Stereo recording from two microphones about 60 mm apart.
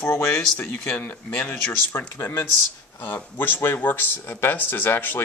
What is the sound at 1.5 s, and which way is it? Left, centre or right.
Speech, left.